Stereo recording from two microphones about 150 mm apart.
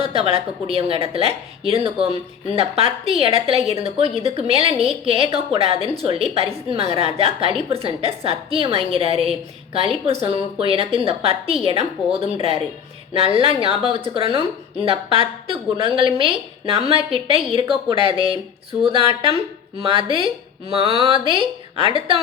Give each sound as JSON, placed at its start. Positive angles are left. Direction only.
{"t": 0.1, "sound": "a woman's voice", "side_deg": -40}